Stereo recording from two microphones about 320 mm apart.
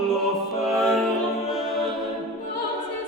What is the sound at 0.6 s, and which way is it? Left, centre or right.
Music, centre.